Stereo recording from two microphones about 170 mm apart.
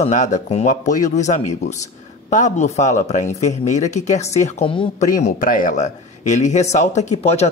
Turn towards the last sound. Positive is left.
turn(degrees=40)  # may be behind; listen again after turning